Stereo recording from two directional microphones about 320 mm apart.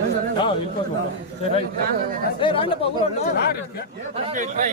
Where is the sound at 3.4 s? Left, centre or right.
Left.